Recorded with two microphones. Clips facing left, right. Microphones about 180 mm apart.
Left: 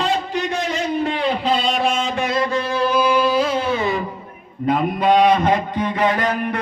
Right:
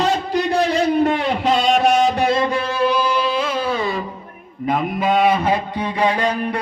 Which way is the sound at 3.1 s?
50° left (ahead or behind).